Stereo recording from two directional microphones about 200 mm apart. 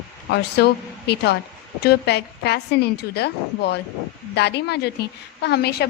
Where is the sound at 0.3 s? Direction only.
55° left (ahead or behind).